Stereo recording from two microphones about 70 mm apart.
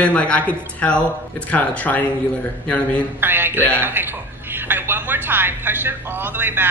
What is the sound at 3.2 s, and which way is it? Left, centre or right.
A woman's voice, right.